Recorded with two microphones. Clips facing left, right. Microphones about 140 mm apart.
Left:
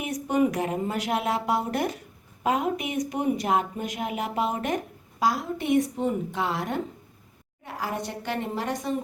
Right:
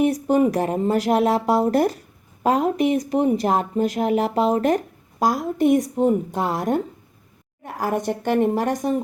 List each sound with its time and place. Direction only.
0.0 s a woman's voice: 35° right (ahead or behind)